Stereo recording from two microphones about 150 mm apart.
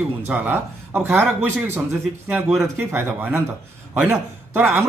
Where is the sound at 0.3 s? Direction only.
10° right (ahead or behind).